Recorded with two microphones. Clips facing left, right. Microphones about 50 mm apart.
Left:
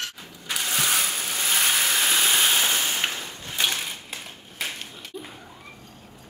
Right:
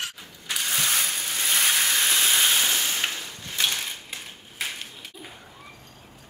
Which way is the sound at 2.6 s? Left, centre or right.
Centre.